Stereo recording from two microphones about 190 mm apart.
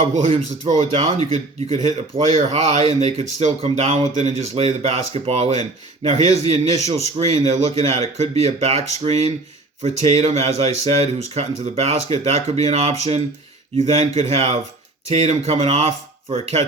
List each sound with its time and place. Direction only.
0.3 s speech: 30° right (ahead or behind)